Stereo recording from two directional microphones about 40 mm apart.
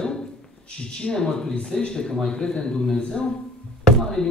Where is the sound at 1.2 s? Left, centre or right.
Centre.